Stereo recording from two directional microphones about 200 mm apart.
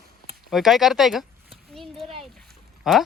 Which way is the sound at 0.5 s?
Centre (ahead or behind).